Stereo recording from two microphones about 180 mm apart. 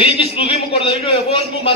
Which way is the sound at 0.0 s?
30° left (ahead or behind).